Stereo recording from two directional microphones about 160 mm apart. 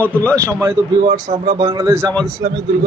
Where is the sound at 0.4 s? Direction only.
15° right (ahead or behind).